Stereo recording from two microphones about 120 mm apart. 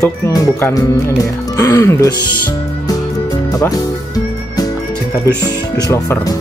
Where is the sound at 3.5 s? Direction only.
30° left (ahead or behind).